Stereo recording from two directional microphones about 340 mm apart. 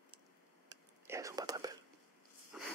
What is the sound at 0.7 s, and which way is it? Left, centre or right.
Whispering, centre.